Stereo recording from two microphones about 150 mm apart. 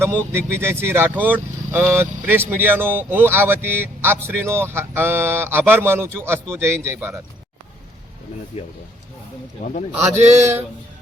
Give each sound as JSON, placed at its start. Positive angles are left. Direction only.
{"t": 0.3, "sound": "speech", "side_deg": -15}
{"t": 8.5, "sound": "speech", "side_deg": 45}
{"t": 9.9, "sound": "a man's voice", "side_deg": -20}
{"t": 10.2, "sound": "speech", "side_deg": -50}